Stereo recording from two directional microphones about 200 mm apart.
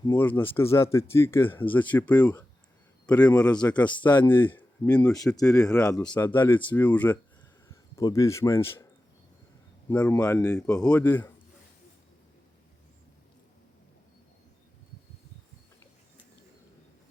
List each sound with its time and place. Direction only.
0.0 s speech: 15° left (ahead or behind)
9.9 s speech: 5° left (ahead or behind)
10.8 s speech: 5° left (ahead or behind)